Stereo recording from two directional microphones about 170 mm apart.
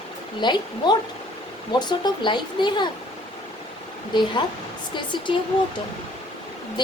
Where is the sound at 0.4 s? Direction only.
25° left (ahead or behind).